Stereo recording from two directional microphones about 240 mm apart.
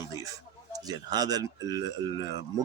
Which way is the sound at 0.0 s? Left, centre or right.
Centre.